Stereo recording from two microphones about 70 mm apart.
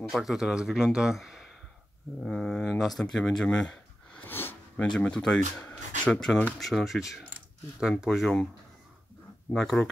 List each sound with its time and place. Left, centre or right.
0.1 s speech: centre
2.2 s speech: centre
4.2 s a sound: left
4.7 s speech: centre
5.6 s a sound: left
6.1 s speech: centre
9.5 s speech: centre